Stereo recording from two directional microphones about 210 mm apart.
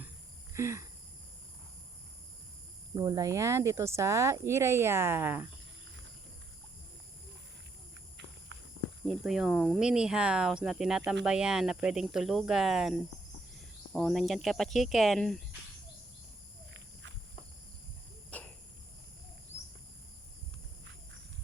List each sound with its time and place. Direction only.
0.5 s speech: 15° right (ahead or behind)
2.9 s speech: 15° right (ahead or behind)
9.0 s speech: centre (ahead or behind)
16.7 s walk: 60° right (ahead or behind)
18.3 s cricket: 5° left (ahead or behind)